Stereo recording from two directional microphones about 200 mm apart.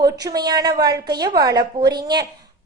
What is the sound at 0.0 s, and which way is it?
A woman's voice, 20° right (ahead or behind).